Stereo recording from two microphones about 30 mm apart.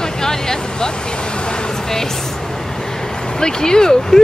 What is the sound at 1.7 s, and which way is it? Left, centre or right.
Speech, centre.